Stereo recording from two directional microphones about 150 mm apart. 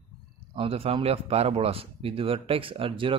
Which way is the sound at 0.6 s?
40° right (ahead or behind).